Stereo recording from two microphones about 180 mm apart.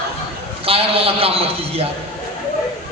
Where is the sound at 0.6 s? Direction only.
30° right (ahead or behind).